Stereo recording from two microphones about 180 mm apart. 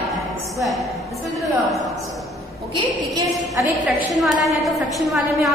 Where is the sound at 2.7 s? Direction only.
20° right (ahead or behind).